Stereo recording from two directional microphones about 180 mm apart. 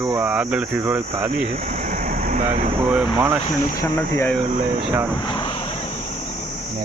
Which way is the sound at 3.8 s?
10° left (ahead or behind).